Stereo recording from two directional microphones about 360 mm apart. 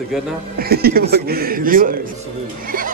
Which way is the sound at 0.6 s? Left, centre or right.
Right.